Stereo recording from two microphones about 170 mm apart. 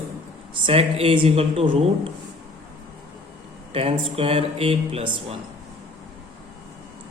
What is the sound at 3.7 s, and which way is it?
Speech, 35° right (ahead or behind).